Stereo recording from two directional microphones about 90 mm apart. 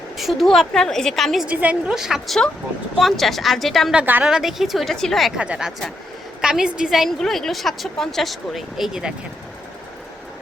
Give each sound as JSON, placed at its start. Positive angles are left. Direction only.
{"t": 0.2, "sound": "a woman's voice", "side_deg": 0}
{"t": 1.5, "sound": "a woman's voice", "side_deg": -15}
{"t": 2.0, "sound": "a woman's voice", "side_deg": -5}
{"t": 3.9, "sound": "a woman's voice", "side_deg": -15}
{"t": 4.3, "sound": "a woman's voice", "side_deg": -5}
{"t": 5.4, "sound": "a woman's voice", "side_deg": -10}